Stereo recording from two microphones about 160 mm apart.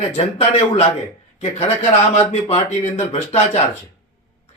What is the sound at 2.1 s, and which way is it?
A man's voice, 40° left (ahead or behind).